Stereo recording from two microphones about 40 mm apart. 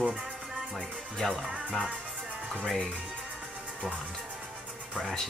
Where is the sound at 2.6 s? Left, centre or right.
Centre.